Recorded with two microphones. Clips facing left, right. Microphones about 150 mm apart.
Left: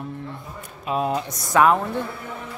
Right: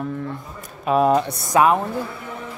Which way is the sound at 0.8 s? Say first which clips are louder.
Right 7 dB; 55° right (ahead or behind).